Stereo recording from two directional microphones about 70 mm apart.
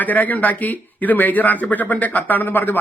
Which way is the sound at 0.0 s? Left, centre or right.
Left.